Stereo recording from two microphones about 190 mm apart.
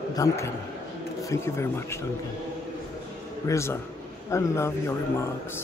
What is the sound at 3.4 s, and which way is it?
A man's voice, 15° left (ahead or behind).